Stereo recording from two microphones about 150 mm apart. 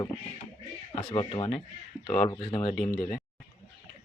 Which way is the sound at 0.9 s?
35° left (ahead or behind).